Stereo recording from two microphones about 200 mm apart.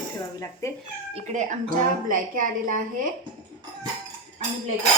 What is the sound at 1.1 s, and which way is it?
A woman's voice, 40° right (ahead or behind).